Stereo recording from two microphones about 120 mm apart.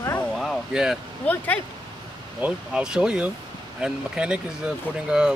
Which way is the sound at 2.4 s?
5° right (ahead or behind).